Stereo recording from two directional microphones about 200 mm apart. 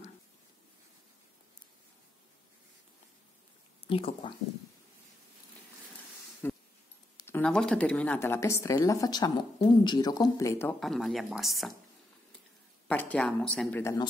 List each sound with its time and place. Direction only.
3.8 s speech: 25° left (ahead or behind)
6.4 s a sound: 10° left (ahead or behind)
7.2 s a woman's voice: 10° left (ahead or behind)
10.8 s speech: centre (ahead or behind)
12.8 s a woman's voice: 5° left (ahead or behind)